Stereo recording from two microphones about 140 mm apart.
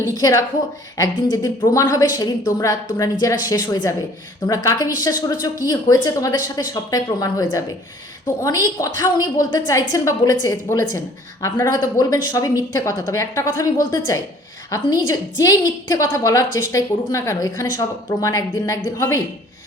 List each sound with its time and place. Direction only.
0.0 s a woman's voice: 25° left (ahead or behind)